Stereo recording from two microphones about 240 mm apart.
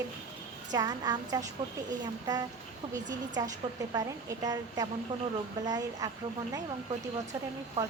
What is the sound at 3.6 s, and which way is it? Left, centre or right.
A woman's voice, centre.